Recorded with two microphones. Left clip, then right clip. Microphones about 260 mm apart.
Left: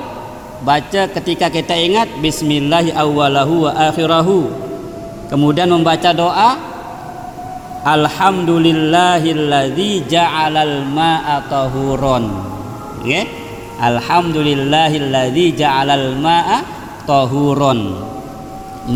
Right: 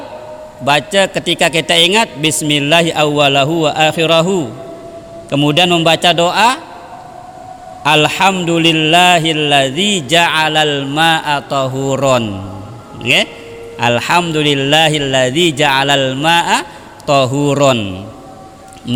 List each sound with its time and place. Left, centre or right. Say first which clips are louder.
0.6 s a man's voice: right 2 dB; right
7.9 s a man's voice: right 2 dB; right